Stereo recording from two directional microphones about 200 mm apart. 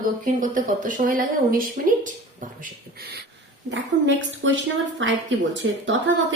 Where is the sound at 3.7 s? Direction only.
65° right (ahead or behind).